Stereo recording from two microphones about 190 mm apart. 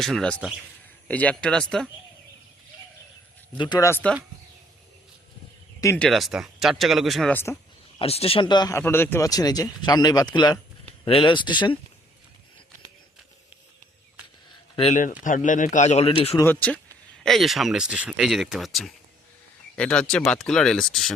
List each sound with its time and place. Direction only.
0.0 s speech: centre (ahead or behind)
3.6 s speech: 20° left (ahead or behind)
5.8 s speech: 15° left (ahead or behind)
6.1 s speech: centre (ahead or behind)
7.9 s speech: 30° left (ahead or behind)
14.5 s a sound: 30° left (ahead or behind)
15.2 s a man's voice: 45° left (ahead or behind)
16.4 s speech: 10° left (ahead or behind)